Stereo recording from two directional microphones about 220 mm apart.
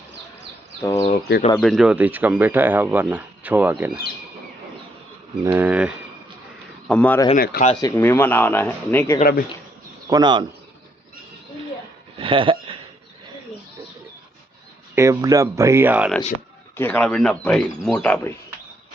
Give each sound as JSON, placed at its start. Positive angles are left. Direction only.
{"t": 0.8, "sound": "speech", "side_deg": 15}
{"t": 1.1, "sound": "speech", "side_deg": 40}
{"t": 1.5, "sound": "speech", "side_deg": 0}
{"t": 5.4, "sound": "speech", "side_deg": -10}
{"t": 6.8, "sound": "speech", "side_deg": 5}
{"t": 7.3, "sound": "speech", "side_deg": 40}
{"t": 7.7, "sound": "speech", "side_deg": 15}
{"t": 10.1, "sound": "speech", "side_deg": -20}
{"t": 12.1, "sound": "a sound", "side_deg": -25}
{"t": 14.9, "sound": "speech", "side_deg": -15}
{"t": 16.7, "sound": "speech", "side_deg": 10}